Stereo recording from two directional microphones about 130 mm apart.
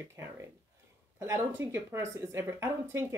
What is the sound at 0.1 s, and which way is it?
Speech, 20° right (ahead or behind).